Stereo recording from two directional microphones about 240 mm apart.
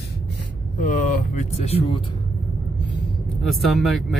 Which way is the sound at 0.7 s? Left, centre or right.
Left.